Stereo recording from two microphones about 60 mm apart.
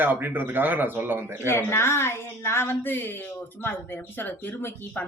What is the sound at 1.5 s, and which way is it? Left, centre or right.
A woman's voice, left.